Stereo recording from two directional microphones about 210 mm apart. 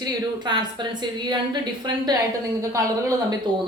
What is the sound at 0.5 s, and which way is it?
Speech, 20° right (ahead or behind).